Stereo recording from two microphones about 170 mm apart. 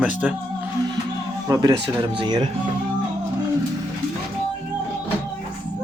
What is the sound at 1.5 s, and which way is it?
Speech, 20° right (ahead or behind).